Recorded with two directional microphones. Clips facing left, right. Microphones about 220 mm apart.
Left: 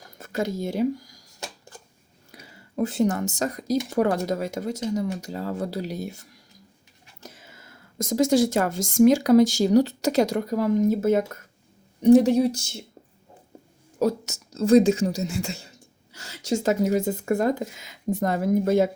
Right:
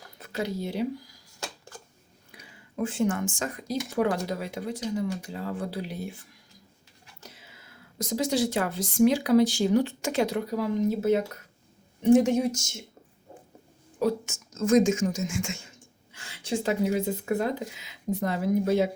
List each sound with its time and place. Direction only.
0.2 s speech: 45° left (ahead or behind)
2.3 s speech: 40° left (ahead or behind)
12.0 s speech: 40° left (ahead or behind)
14.0 s speech: 40° left (ahead or behind)